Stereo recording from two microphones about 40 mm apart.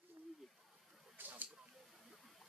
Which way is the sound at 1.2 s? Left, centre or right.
Right.